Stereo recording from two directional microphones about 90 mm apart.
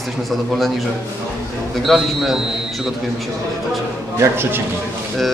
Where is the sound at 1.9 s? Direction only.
Centre (ahead or behind).